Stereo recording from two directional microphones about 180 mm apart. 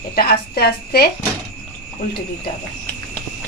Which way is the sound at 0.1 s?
60° left (ahead or behind).